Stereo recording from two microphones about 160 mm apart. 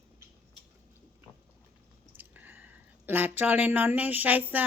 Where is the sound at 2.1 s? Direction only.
10° right (ahead or behind).